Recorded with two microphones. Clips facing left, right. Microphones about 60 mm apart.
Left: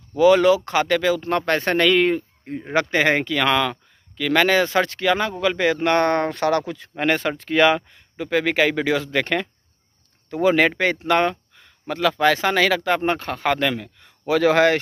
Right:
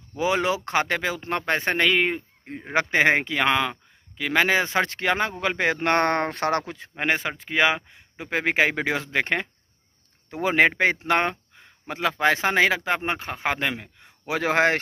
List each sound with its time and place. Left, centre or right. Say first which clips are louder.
0.2 s speech: left 9 dB; right
7.2 s speech: left 5 dB; centre; by 14.8 s right